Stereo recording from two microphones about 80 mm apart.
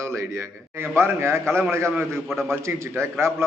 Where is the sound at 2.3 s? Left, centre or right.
Centre.